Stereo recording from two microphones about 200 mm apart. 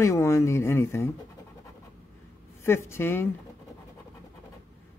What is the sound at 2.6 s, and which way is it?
Speech, 15° left (ahead or behind).